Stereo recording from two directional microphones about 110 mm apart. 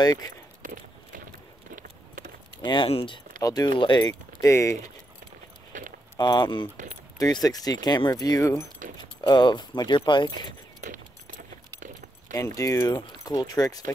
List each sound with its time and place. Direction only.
0.0 s speech: 35° left (ahead or behind)
2.6 s speech: 45° left (ahead or behind)
3.4 s speech: 35° left (ahead or behind)
3.7 s speech: 50° left (ahead or behind)
4.1 s speech: 30° left (ahead or behind)
6.1 s speech: 45° left (ahead or behind); by 8.6 s 25° left (ahead or behind)
8.9 s speech: 40° left (ahead or behind)
12.4 s speech: 30° left (ahead or behind)